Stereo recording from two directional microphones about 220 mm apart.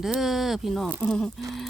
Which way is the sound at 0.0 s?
Centre (ahead or behind).